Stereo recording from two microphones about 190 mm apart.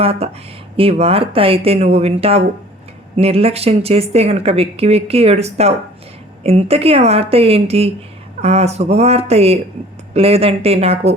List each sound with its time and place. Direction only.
0.0 s speech: 30° right (ahead or behind)